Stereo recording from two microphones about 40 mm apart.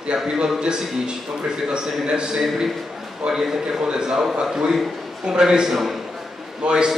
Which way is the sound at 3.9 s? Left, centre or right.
Centre.